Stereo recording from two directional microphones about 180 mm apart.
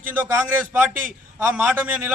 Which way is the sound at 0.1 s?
10° right (ahead or behind).